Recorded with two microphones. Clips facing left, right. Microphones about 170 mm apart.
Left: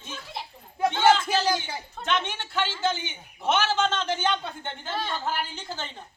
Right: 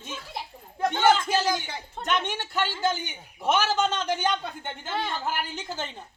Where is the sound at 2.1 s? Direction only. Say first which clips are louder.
Right 1 dB; 40° right (ahead or behind).